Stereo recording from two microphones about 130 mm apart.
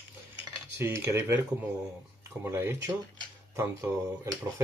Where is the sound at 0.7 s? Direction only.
20° right (ahead or behind).